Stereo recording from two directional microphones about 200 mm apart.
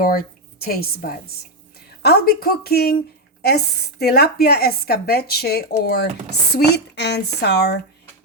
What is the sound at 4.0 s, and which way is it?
Speech, 50° left (ahead or behind).